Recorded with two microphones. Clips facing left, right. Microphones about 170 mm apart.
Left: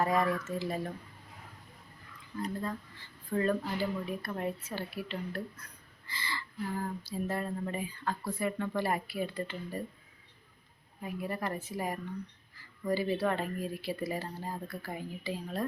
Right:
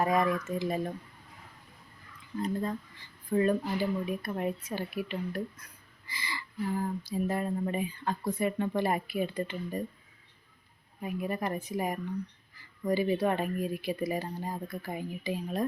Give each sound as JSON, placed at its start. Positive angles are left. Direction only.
{"t": 0.0, "sound": "speech", "side_deg": -15}
{"t": 2.4, "sound": "speech", "side_deg": -20}
{"t": 11.0, "sound": "speech", "side_deg": -20}